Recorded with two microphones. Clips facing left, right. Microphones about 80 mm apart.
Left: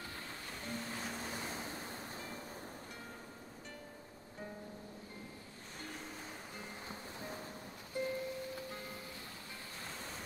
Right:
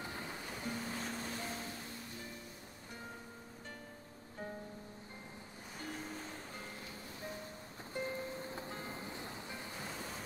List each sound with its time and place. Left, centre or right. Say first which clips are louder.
0.0 s music: right 3 dB; centre
0.5 s music: right 1 dB; centre
1.3 s waves: even; centre
5.8 s waves: right 3 dB; centre
7.9 s music: left 2 dB; right
9.8 s vehicle: even; centre